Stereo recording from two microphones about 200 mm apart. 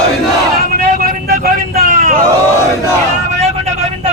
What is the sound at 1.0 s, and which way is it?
Vehicle, 50° right (ahead or behind).